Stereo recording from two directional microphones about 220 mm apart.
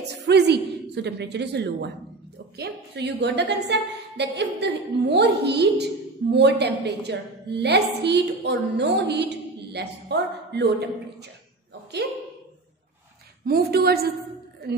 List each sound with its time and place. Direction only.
0.2 s a woman's voice: 50° right (ahead or behind)
13.5 s a woman's voice: 45° right (ahead or behind)